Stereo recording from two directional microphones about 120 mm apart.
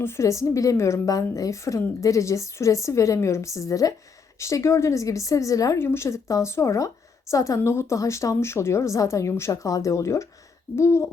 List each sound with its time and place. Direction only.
0.0 s a woman's voice: 25° left (ahead or behind)